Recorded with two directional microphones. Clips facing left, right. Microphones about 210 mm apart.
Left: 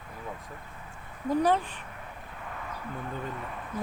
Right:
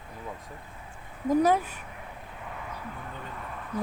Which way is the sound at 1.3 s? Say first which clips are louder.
Right 2 dB; 10° right (ahead or behind).